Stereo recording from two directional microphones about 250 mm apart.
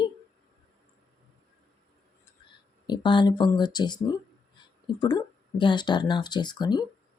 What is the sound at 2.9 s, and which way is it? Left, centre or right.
Speech, centre.